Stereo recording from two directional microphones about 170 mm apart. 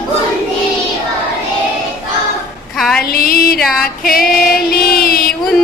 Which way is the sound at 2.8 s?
Centre (ahead or behind).